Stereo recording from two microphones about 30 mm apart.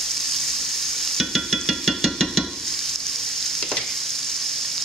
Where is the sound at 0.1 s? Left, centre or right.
Centre.